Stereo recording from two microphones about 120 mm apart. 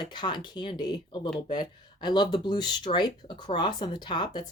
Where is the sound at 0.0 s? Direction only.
40° left (ahead or behind).